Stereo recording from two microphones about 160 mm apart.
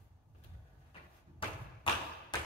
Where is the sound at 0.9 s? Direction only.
30° left (ahead or behind).